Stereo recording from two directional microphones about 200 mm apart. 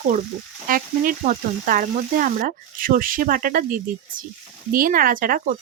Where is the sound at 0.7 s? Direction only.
45° right (ahead or behind).